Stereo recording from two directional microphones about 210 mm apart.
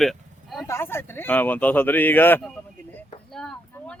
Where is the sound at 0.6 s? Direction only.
10° left (ahead or behind).